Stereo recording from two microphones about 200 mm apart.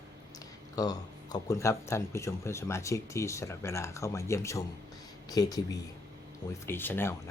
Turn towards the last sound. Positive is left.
turn(degrees=10)  # may be behind; listen again after turning